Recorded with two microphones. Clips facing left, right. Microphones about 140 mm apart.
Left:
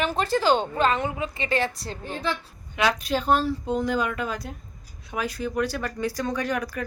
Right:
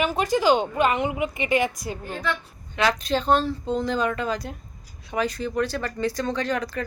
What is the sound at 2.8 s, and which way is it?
Speech, 10° left (ahead or behind).